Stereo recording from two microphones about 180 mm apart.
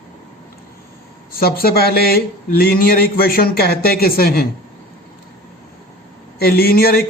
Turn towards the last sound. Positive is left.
turn(degrees=55)  # may be behind; listen again after turning